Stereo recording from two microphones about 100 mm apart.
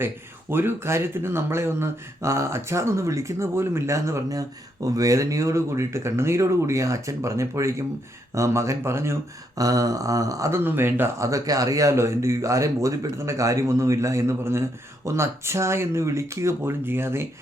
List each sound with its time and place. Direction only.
0.5 s speech: 25° right (ahead or behind)
9.6 s speech: 40° right (ahead or behind)
10.6 s speech: 20° right (ahead or behind)